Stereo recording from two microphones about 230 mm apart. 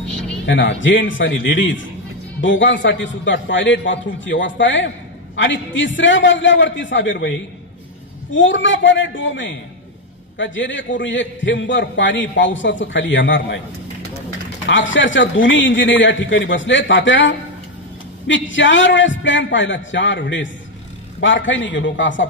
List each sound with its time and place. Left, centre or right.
0.1 s music: centre
0.5 s a man's voice: left
14.7 s a man's voice: left